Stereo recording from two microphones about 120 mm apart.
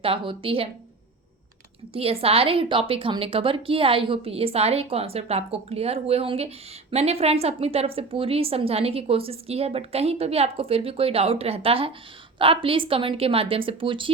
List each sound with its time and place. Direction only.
0.0 s a woman's voice: 45° right (ahead or behind)
1.9 s a woman's voice: 55° right (ahead or behind)